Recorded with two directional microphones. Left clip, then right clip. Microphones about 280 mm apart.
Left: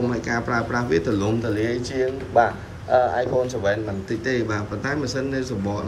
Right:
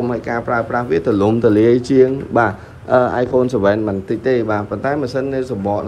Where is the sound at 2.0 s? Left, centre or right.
Right.